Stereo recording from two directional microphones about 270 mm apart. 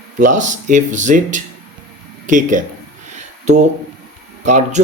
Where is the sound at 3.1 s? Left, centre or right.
Right.